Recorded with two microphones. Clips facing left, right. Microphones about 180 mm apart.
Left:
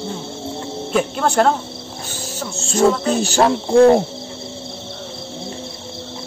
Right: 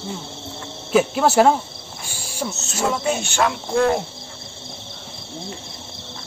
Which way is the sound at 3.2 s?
35° left (ahead or behind).